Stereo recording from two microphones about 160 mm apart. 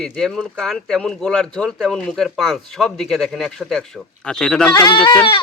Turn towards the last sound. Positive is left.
turn(degrees=25)  # may be behind; listen again after turning